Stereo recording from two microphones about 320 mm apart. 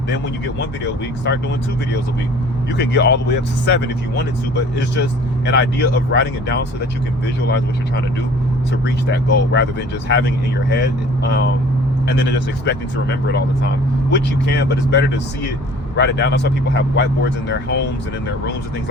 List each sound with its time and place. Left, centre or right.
2.7 s speech: left
9.0 s speech: left
12.0 s speech: left